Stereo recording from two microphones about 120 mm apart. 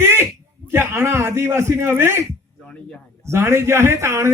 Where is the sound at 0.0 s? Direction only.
20° right (ahead or behind).